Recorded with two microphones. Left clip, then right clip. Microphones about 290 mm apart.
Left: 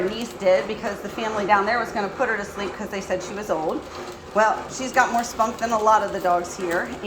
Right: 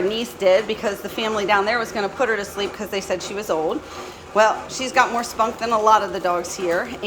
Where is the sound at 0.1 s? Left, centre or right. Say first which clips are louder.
Right 3 dB; centre.